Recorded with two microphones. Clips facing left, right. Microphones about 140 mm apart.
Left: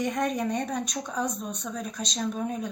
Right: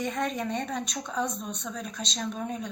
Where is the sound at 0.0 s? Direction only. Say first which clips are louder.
Left 3 dB; 15° left (ahead or behind).